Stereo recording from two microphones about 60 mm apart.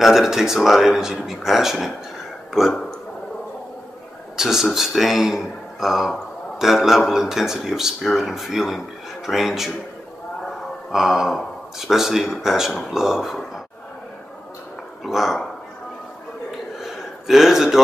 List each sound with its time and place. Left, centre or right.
0.0 s speech: centre
4.4 s speech: centre
10.9 s speech: centre
15.0 s speech: centre
16.8 s a sound: centre